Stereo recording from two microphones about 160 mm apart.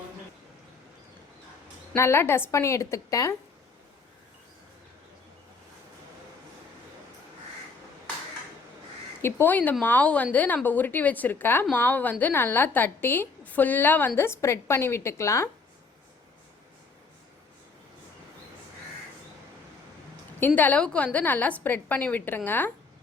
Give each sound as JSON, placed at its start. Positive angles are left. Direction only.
{"t": 2.0, "sound": "a woman's voice", "side_deg": 15}
{"t": 9.2, "sound": "a woman's voice", "side_deg": 10}
{"t": 20.6, "sound": "a woman's voice", "side_deg": 10}